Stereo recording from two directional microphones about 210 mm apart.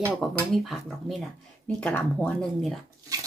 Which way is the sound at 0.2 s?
Centre (ahead or behind).